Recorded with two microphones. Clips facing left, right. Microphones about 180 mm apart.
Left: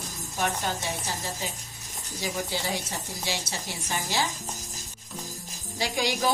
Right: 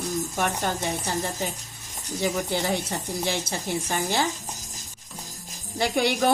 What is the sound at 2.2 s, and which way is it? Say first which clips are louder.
A woman's voice: right 5 dB; 55° right (ahead or behind).